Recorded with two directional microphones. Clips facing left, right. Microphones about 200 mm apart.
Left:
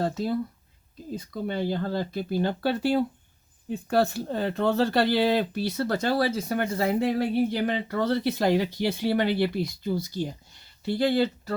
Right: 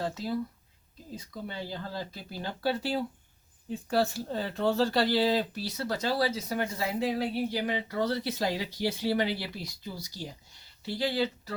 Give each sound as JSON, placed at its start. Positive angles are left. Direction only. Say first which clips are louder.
{"t": 1.1, "sound": "speech", "louder": "left 8 dB", "side_deg": 55}